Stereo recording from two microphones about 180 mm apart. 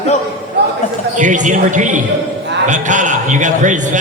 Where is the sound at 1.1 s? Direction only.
45° right (ahead or behind).